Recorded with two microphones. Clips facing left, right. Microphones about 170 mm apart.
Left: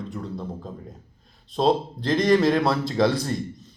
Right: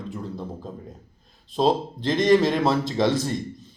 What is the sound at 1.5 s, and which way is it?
A man's voice, centre (ahead or behind).